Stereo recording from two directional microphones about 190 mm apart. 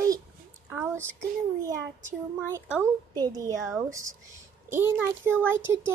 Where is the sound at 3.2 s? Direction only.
20° right (ahead or behind).